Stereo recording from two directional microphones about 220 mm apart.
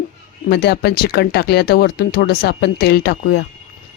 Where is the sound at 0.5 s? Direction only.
45° left (ahead or behind).